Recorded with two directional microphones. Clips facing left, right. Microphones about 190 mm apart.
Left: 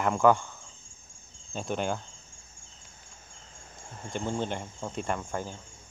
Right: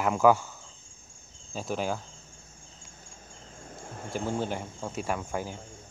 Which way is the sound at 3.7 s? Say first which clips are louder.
Right 3 dB; 55° right (ahead or behind).